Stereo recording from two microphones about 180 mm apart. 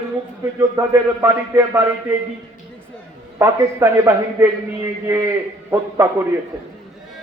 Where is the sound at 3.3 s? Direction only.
15° right (ahead or behind).